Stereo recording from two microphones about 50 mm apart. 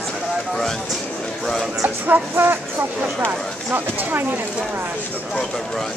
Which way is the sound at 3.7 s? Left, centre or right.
Right.